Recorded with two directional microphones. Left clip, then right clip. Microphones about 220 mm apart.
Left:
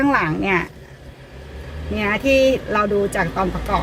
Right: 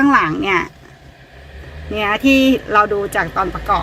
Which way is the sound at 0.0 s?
45° right (ahead or behind).